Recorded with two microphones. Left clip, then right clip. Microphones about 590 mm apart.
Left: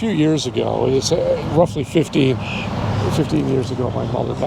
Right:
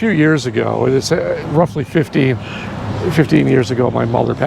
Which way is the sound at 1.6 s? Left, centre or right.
Right.